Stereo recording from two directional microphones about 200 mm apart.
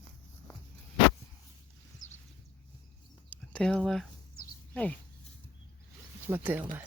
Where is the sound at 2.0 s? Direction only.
70° left (ahead or behind).